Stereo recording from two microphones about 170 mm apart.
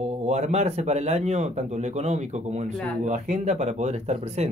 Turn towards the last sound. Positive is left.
turn(degrees=-40)  # may be behind; listen again after turning